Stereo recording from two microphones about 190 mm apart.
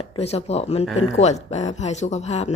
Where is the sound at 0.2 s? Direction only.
35° left (ahead or behind).